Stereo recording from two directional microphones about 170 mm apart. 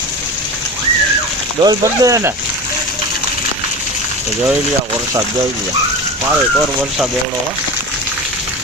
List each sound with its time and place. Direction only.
1.6 s speech: 20° right (ahead or behind)